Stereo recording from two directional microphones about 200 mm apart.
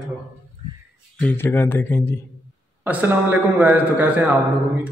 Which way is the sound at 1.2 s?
10° left (ahead or behind).